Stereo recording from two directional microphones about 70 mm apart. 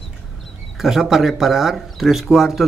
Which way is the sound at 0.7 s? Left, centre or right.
Centre.